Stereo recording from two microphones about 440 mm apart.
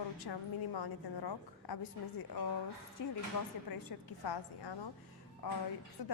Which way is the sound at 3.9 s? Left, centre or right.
Left.